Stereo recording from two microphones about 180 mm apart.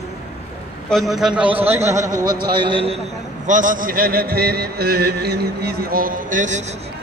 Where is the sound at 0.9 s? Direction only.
Centre (ahead or behind); by 2.9 s 30° right (ahead or behind).